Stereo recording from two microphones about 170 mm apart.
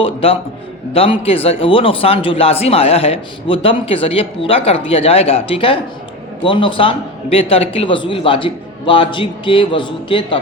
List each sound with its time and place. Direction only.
0.0 s a man's voice: 35° left (ahead or behind)